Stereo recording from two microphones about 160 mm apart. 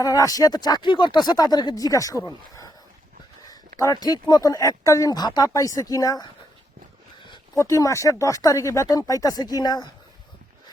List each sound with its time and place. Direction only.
0.0 s speech: 20° left (ahead or behind)
3.8 s speech: 20° left (ahead or behind)
7.5 s speech: 20° left (ahead or behind)